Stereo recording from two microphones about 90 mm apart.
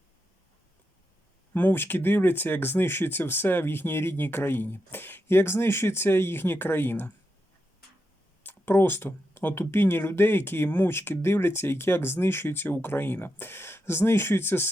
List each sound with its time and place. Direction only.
1.5 s speech: 20° left (ahead or behind)
8.4 s speech: 25° left (ahead or behind)